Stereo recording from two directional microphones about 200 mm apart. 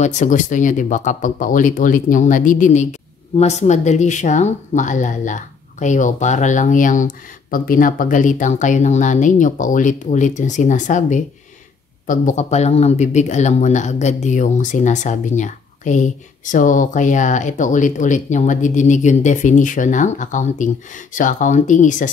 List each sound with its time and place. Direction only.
0.0 s speech: 35° left (ahead or behind)